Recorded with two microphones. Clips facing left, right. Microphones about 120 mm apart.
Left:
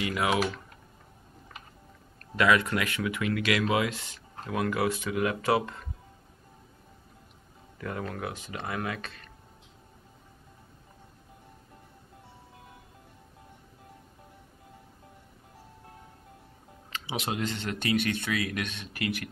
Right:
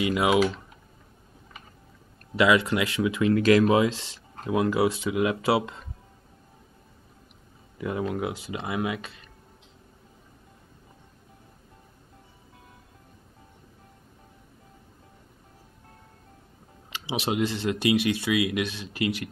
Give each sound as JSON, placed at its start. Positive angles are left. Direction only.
{"t": 0.0, "sound": "speech", "side_deg": -20}
{"t": 2.3, "sound": "speech", "side_deg": -20}
{"t": 7.8, "sound": "speech", "side_deg": -15}
{"t": 16.9, "sound": "speech", "side_deg": -20}